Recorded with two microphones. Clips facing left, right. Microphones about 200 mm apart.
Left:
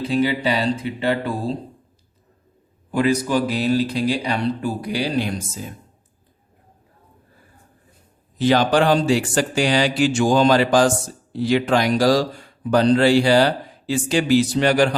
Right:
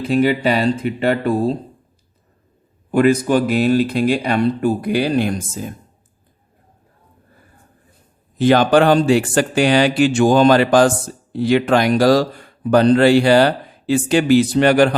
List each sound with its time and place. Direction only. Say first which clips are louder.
0.0 s speech: right 4 dB; 55° right (ahead or behind)
2.9 s speech: right 5 dB; 55° right (ahead or behind)
8.4 s speech: right 4 dB; 55° right (ahead or behind)